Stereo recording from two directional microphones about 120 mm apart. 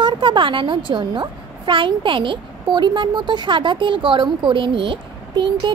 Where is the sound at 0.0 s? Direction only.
45° right (ahead or behind).